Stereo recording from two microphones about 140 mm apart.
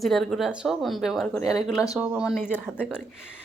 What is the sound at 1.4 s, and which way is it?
Speech, 25° left (ahead or behind).